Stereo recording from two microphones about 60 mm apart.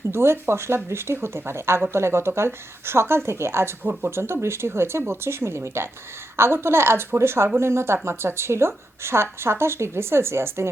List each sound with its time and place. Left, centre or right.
0.1 s speech: right